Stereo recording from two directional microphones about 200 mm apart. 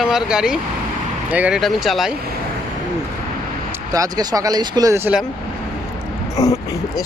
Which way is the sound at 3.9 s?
20° right (ahead or behind).